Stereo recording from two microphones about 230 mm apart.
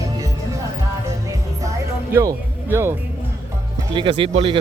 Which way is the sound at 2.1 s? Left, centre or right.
Centre.